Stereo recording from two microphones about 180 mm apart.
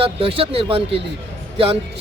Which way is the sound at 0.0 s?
30° right (ahead or behind).